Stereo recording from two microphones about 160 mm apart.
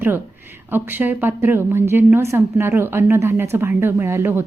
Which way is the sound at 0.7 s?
10° right (ahead or behind).